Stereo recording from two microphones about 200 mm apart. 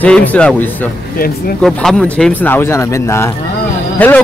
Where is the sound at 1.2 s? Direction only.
50° left (ahead or behind).